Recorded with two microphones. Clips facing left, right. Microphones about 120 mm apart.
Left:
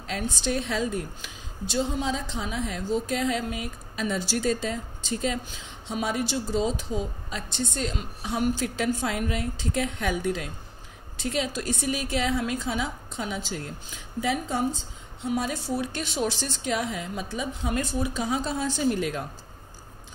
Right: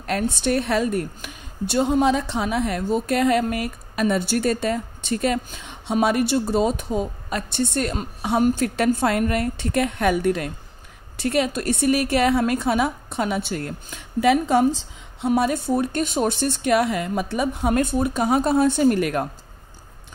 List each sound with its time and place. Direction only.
0.0 s a woman's voice: 60° right (ahead or behind)